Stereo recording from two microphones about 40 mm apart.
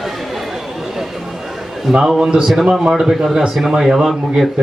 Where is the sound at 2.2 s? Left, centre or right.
Right.